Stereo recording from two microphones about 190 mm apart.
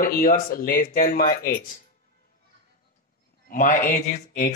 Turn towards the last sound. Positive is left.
turn(degrees=50)  # may be behind; listen again after turning